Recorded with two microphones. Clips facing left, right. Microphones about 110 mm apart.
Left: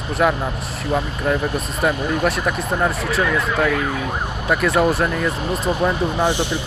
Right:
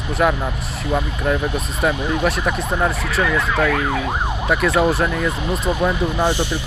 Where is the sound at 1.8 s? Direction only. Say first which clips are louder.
Even; centre (ahead or behind).